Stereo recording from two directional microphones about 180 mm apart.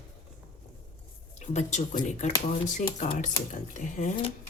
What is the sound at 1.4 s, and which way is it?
A woman's voice, 40° left (ahead or behind).